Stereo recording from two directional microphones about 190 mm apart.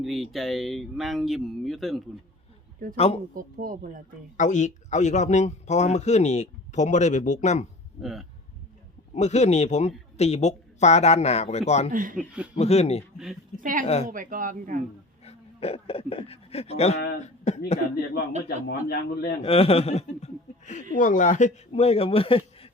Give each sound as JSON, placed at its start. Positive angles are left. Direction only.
{"t": 0.0, "sound": "speech", "side_deg": 0}
{"t": 2.9, "sound": "a man's voice", "side_deg": 30}
{"t": 3.3, "sound": "speech", "side_deg": -45}
{"t": 4.4, "sound": "a man's voice", "side_deg": 40}
{"t": 8.0, "sound": "speech", "side_deg": 0}
{"t": 9.1, "sound": "a man's voice", "side_deg": 35}
{"t": 11.9, "sound": "speech", "side_deg": -45}
{"t": 12.5, "sound": "a man's voice", "side_deg": 35}
{"t": 13.6, "sound": "speech", "side_deg": -45}
{"t": 13.8, "sound": "a man's voice", "side_deg": 30}
{"t": 14.1, "sound": "speech", "side_deg": -45}
{"t": 15.2, "sound": "speech", "side_deg": 30}
{"t": 18.4, "sound": "a man's voice", "side_deg": 55}
{"t": 19.4, "sound": "a man's voice", "side_deg": 30}